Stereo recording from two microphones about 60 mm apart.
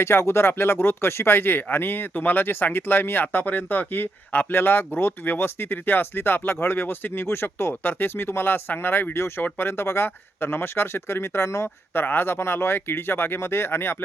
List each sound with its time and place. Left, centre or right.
0.0 s speech: left
11.9 s speech: left